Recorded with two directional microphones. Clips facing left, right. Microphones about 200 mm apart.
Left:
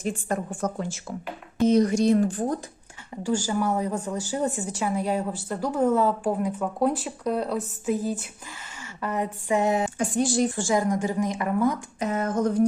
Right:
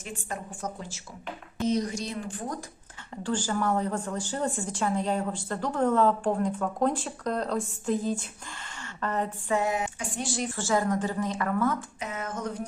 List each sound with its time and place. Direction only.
0.0 s a woman's voice: 50° left (ahead or behind)
3.2 s speech: 10° left (ahead or behind)
10.0 s speech: 40° left (ahead or behind)
10.5 s speech: 15° left (ahead or behind)
11.9 s speech: 35° left (ahead or behind)